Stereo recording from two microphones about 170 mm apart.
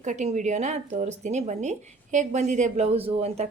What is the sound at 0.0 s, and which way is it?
A woman's voice, 45° right (ahead or behind).